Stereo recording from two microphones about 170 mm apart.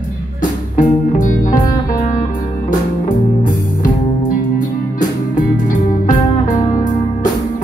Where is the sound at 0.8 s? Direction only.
50° left (ahead or behind).